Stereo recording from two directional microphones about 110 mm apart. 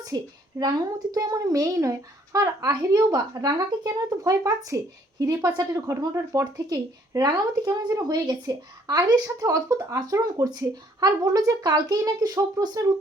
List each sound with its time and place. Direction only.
0.1 s speech: 35° right (ahead or behind)